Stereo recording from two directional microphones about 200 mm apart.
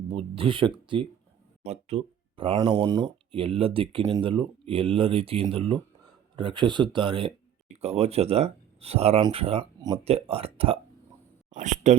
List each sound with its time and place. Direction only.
0.1 s speech: 25° right (ahead or behind)